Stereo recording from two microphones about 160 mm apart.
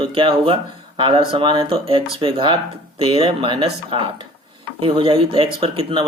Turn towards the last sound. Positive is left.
turn(degrees=-35)  # may be behind; listen again after turning